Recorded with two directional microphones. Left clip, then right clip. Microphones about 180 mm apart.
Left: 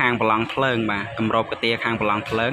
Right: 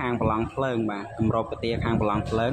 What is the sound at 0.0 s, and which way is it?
Speech, 5° right (ahead or behind).